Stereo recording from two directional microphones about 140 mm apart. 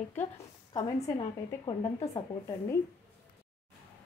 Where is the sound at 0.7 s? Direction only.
30° left (ahead or behind).